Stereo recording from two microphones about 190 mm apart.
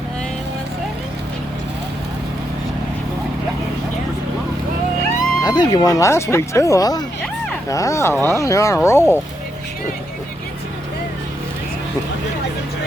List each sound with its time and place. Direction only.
5.4 s speech: 20° left (ahead or behind)